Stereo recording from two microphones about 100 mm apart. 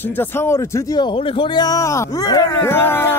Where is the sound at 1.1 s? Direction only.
60° left (ahead or behind).